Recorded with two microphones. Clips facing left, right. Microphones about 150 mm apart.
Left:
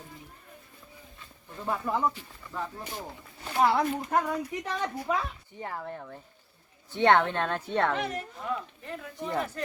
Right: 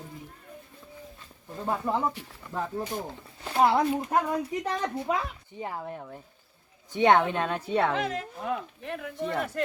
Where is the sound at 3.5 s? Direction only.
25° right (ahead or behind).